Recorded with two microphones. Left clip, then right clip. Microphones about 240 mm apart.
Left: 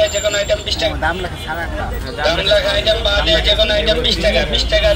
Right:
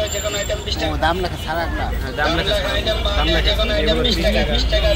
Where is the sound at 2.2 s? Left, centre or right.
Left.